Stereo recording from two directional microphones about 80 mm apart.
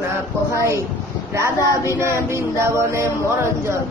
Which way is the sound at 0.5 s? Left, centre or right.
Right.